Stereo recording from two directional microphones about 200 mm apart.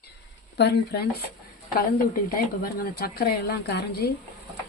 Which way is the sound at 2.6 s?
50° left (ahead or behind).